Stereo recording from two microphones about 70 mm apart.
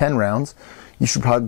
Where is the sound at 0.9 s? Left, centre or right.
Centre.